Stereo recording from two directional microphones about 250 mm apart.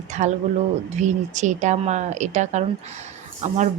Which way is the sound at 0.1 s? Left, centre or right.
Right.